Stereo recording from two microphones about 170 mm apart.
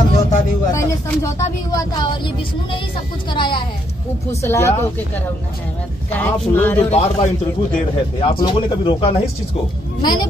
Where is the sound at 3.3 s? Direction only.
30° left (ahead or behind).